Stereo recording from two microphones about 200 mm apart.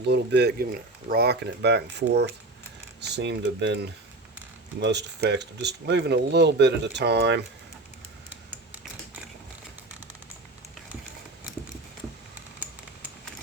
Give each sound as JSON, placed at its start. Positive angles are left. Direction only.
{"t": 0.1, "sound": "speech", "side_deg": -55}
{"t": 8.3, "sound": "computer keyboard", "side_deg": -10}